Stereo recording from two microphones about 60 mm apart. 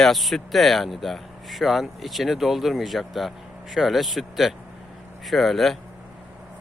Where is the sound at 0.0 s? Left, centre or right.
Centre.